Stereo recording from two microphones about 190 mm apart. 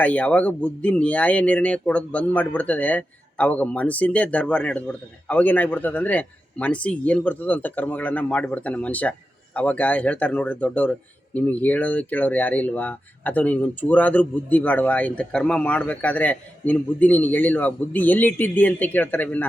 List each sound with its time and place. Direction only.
0.0 s speech: 5° left (ahead or behind)